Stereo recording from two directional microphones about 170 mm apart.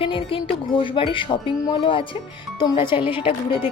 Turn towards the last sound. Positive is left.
turn(degrees=30)  # may be behind; listen again after turning